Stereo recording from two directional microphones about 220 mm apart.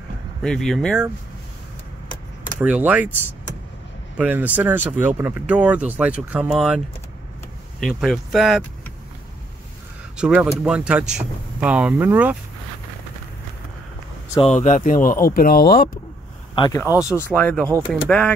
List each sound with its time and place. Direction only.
0.4 s speech: centre (ahead or behind)
2.6 s speech: 5° right (ahead or behind)
4.2 s speech: 10° right (ahead or behind)
7.8 s speech: centre (ahead or behind)
10.1 s speech: 5° right (ahead or behind)
14.3 s speech: 25° left (ahead or behind)
16.5 s speech: 15° left (ahead or behind)
17.6 s speech: 10° right (ahead or behind)
18.0 s speech: 5° left (ahead or behind)